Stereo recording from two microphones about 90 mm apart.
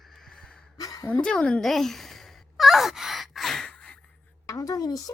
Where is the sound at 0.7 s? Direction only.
40° left (ahead or behind).